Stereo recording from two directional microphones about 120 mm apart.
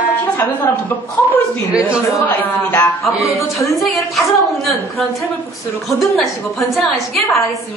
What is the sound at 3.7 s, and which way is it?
A woman's voice, centre (ahead or behind).